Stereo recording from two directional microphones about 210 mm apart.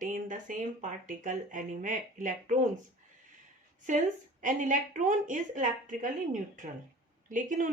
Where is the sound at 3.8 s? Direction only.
35° right (ahead or behind).